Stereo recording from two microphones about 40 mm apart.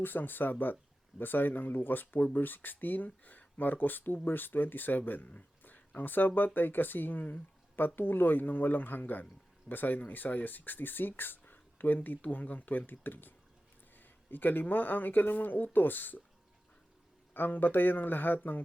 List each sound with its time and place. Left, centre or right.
0.0 s speech: left
17.3 s speech: left